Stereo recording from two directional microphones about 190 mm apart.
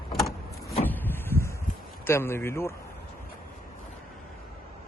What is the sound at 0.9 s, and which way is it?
Vehicle, 10° left (ahead or behind).